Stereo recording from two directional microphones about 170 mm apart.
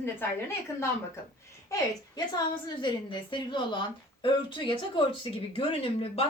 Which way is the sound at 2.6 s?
25° left (ahead or behind).